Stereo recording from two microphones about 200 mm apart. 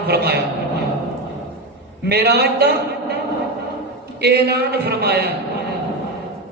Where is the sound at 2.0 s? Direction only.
55° right (ahead or behind).